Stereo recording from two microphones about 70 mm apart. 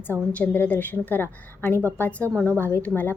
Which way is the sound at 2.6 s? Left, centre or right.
Left.